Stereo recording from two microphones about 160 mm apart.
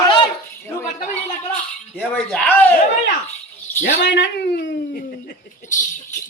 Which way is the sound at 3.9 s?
90° left.